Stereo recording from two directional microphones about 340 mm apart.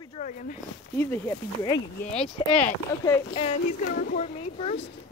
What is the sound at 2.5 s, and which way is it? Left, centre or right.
A woman's voice, centre.